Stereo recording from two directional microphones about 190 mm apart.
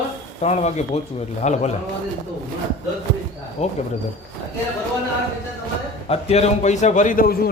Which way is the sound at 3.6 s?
35° left (ahead or behind).